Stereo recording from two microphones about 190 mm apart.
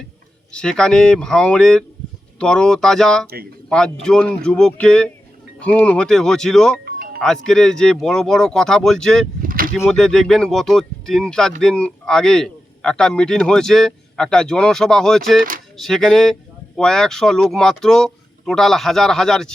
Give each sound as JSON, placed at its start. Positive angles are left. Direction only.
{"t": 0.5, "sound": "speech", "side_deg": 5}
{"t": 9.4, "sound": "vehicle", "side_deg": -45}
{"t": 9.8, "sound": "speech", "side_deg": 5}